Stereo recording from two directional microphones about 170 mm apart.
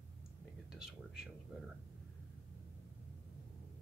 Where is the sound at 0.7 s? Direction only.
5° right (ahead or behind).